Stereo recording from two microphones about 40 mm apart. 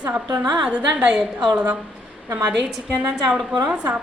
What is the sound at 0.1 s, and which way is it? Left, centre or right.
Speech, right.